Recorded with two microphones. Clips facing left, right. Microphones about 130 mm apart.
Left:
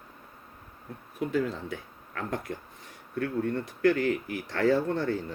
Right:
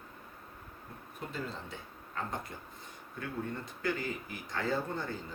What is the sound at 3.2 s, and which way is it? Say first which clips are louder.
Speech: left 10 dB; 65° left (ahead or behind).